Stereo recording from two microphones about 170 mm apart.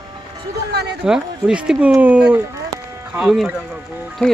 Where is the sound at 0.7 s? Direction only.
75° right (ahead or behind).